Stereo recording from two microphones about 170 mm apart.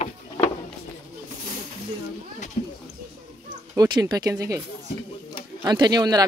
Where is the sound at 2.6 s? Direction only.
45° left (ahead or behind).